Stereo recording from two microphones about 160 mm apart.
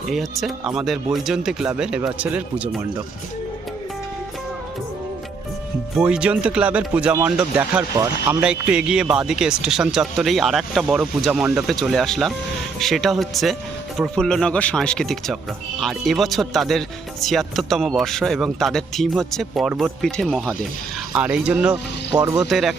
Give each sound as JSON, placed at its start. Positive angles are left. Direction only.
{"t": 0.1, "sound": "speech", "side_deg": 0}
{"t": 6.0, "sound": "speech", "side_deg": -5}
{"t": 22.1, "sound": "speech", "side_deg": -20}
{"t": 22.4, "sound": "speech", "side_deg": 0}